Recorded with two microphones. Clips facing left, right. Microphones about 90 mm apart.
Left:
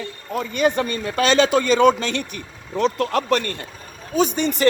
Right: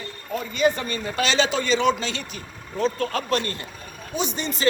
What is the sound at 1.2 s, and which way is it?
Speech, 50° left (ahead or behind).